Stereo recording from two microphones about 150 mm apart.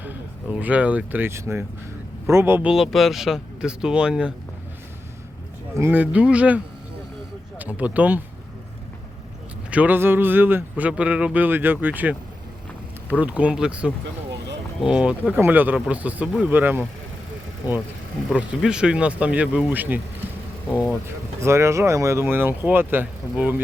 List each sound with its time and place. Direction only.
0.0 s speech: 10° right (ahead or behind)
5.7 s speech: 15° right (ahead or behind)
7.6 s speech: 10° right (ahead or behind)
9.6 s speech: 10° right (ahead or behind)
18.3 s speech: 5° right (ahead or behind)